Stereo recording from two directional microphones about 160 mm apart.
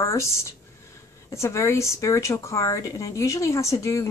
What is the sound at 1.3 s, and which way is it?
Speech, 20° left (ahead or behind).